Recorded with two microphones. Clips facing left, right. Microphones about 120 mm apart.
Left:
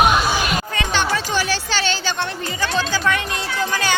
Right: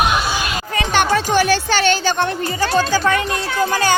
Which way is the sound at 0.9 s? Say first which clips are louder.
Right 6 dB; 50° right (ahead or behind).